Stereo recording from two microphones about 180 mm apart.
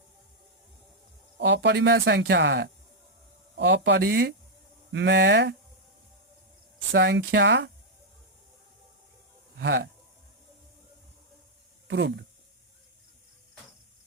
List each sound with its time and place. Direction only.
1.4 s speech: 75° right (ahead or behind)
4.9 s speech: 80° right
6.9 s speech: 75° right (ahead or behind)
9.6 s speech: 75° right (ahead or behind)
11.9 s speech: 80° right